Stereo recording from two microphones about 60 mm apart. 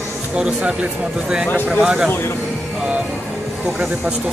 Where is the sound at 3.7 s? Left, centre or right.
Right.